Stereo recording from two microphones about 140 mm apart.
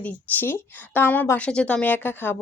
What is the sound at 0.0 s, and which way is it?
Speech, 15° left (ahead or behind).